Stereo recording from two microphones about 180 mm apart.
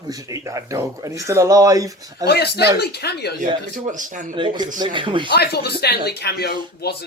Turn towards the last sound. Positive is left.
turn(degrees=60)  # may be behind; listen again after turning